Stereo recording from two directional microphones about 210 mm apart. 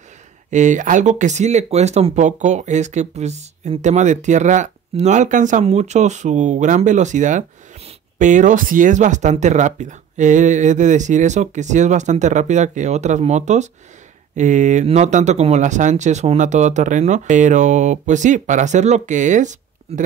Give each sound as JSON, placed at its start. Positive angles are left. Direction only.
{"t": 0.5, "sound": "speech", "side_deg": -35}